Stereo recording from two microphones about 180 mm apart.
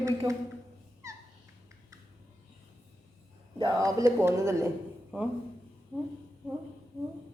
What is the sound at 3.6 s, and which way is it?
Speech, 20° right (ahead or behind).